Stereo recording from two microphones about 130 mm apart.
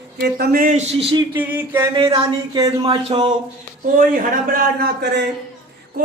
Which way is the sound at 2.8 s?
45° right (ahead or behind).